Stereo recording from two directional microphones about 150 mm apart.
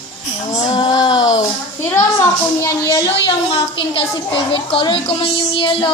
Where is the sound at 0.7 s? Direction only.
30° left (ahead or behind).